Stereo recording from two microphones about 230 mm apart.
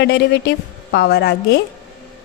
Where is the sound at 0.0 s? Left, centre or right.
Left.